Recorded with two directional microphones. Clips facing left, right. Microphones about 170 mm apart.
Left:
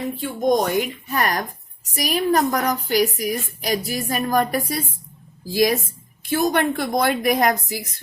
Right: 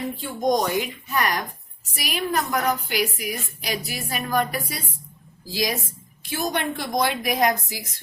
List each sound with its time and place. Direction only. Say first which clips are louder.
0.2 s a woman's voice: left 3 dB; 55° left (ahead or behind)